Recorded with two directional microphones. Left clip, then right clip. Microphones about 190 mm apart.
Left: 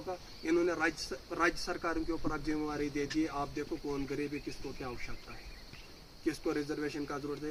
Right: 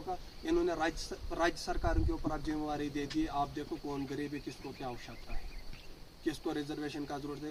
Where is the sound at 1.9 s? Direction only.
5° right (ahead or behind).